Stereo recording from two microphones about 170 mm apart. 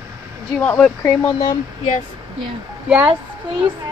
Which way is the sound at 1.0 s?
15° left (ahead or behind).